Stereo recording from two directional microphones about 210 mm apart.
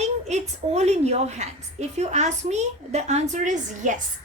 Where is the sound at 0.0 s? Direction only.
30° right (ahead or behind).